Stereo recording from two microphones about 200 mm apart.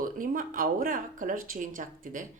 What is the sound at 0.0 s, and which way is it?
A woman's voice, 45° right (ahead or behind).